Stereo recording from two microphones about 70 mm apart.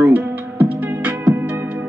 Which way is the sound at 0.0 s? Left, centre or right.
Right.